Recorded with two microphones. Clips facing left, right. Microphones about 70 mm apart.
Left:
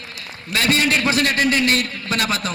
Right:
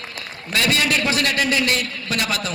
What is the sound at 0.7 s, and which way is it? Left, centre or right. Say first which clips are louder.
A man's voice: left 3 dB; left.